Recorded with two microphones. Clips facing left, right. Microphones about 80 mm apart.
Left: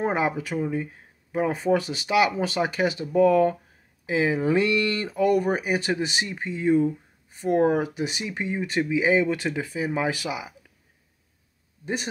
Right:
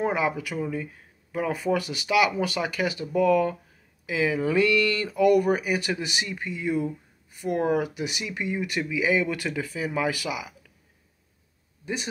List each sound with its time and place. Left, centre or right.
0.0 s speech: left
11.8 s speech: left